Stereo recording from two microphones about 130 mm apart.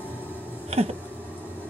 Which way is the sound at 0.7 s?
55° right (ahead or behind).